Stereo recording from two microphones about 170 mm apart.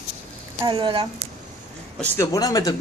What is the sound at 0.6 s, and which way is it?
Speech, 30° right (ahead or behind).